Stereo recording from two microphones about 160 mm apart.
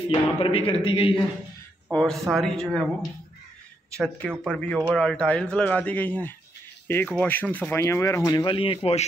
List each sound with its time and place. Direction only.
0.4 s a man's voice: 35° left (ahead or behind)
1.9 s speech: 5° left (ahead or behind)
8.5 s a man's voice: 35° left (ahead or behind)